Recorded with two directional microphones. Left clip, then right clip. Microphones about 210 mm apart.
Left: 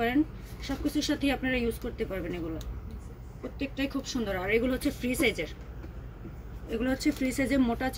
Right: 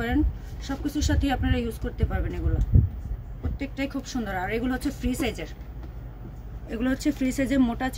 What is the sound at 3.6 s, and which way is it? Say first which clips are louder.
Speech: right 2 dB; 40° right (ahead or behind).